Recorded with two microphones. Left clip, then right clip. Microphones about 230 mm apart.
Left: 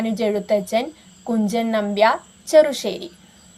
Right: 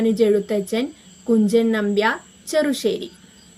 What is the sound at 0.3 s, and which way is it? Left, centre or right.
A woman's voice, left.